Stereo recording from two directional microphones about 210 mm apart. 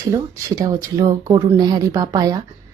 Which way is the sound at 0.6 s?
15° right (ahead or behind).